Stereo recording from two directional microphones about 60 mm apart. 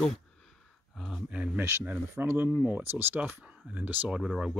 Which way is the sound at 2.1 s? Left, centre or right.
Right.